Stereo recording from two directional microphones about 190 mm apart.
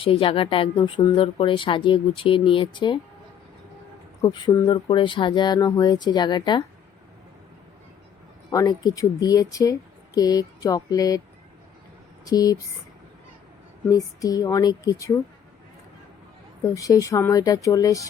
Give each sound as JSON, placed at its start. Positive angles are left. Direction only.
{"t": 0.0, "sound": "speech", "side_deg": 30}
{"t": 4.2, "sound": "speech", "side_deg": 20}
{"t": 8.4, "sound": "speech", "side_deg": 20}
{"t": 12.2, "sound": "speech", "side_deg": 20}
{"t": 13.9, "sound": "speech", "side_deg": 20}
{"t": 16.7, "sound": "speech", "side_deg": 15}